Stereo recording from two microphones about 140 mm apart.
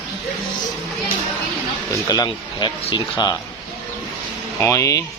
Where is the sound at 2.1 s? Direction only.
25° left (ahead or behind).